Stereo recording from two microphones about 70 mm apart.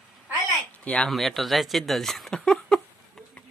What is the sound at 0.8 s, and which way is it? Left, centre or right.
Speech, centre.